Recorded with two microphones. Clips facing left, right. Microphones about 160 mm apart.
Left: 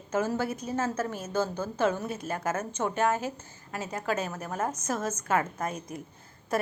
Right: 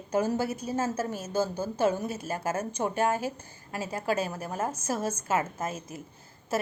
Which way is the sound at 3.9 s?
30° right (ahead or behind).